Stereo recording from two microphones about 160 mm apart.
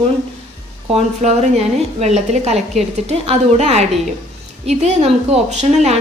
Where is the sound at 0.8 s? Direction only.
40° right (ahead or behind).